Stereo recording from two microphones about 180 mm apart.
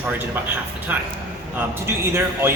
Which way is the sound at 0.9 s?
10° right (ahead or behind).